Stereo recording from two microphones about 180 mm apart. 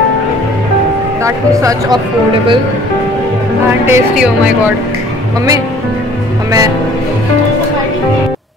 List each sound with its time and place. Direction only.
1.2 s speech: 15° right (ahead or behind)
3.8 s speech: 10° right (ahead or behind)